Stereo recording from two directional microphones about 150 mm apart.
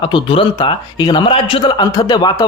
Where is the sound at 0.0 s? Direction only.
35° left (ahead or behind).